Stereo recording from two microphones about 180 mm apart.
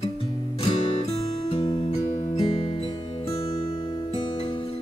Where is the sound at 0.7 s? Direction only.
30° left (ahead or behind).